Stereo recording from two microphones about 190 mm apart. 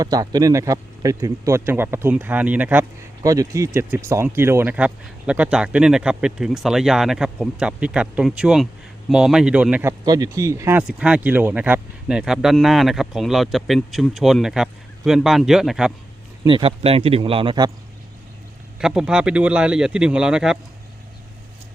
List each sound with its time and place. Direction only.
0.0 s speech: 20° right (ahead or behind)
10.0 s speech: 20° right (ahead or behind); by 15.9 s 5° right (ahead or behind)
16.5 s speech: 30° right (ahead or behind)
18.8 s speech: 5° right (ahead or behind)